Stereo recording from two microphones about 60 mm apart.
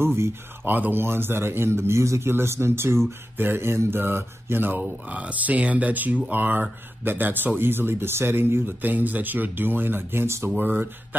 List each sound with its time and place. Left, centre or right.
0.0 s a man's voice: right
10.6 s speech: right